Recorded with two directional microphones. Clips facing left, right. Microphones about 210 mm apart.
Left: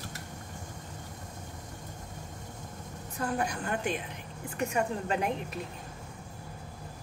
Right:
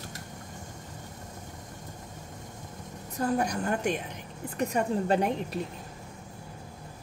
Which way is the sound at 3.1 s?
40° right (ahead or behind).